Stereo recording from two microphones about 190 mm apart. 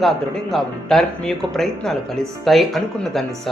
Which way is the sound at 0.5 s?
Centre (ahead or behind).